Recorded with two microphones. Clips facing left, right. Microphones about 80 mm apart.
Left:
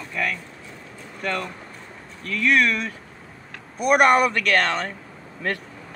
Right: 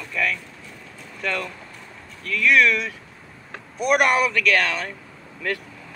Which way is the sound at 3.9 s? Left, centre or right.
Left.